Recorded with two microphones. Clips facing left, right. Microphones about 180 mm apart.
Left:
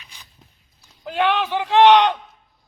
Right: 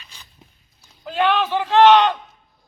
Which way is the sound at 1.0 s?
15° left (ahead or behind).